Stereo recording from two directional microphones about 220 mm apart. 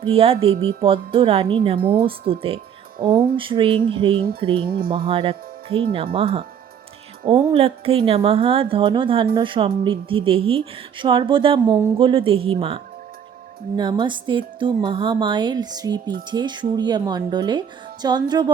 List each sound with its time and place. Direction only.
0.0 s speech: 25° right (ahead or behind)